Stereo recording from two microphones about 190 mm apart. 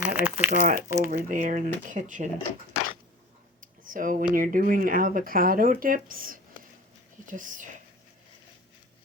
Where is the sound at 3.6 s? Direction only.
45° right (ahead or behind).